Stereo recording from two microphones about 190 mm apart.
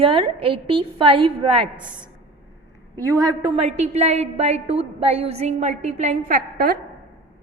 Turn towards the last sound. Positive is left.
turn(degrees=-50)  # may be behind; listen again after turning